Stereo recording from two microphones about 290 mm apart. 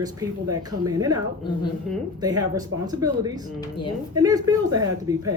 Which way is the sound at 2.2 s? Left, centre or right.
Centre.